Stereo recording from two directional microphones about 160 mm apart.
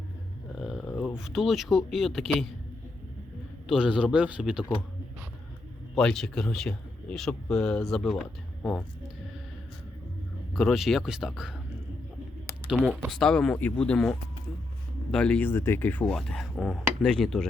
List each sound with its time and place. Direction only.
0.7 s a sound: 5° left (ahead or behind)
1.2 s speech: centre (ahead or behind)
3.7 s a man's voice: 5° right (ahead or behind)
5.9 s speech: 5° left (ahead or behind)
10.5 s speech: centre (ahead or behind)
12.6 s speech: 5° left (ahead or behind)